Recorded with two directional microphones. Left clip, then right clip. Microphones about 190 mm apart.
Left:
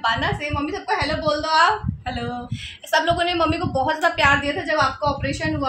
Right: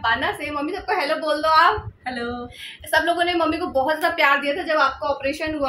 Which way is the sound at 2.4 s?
15° left (ahead or behind).